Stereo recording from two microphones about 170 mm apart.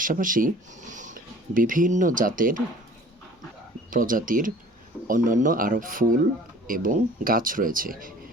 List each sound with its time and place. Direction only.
0.0 s speech: 55° right (ahead or behind)
3.8 s speech: 55° right (ahead or behind)